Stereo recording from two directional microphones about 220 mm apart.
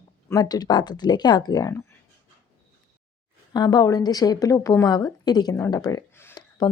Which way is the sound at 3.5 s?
20° left (ahead or behind).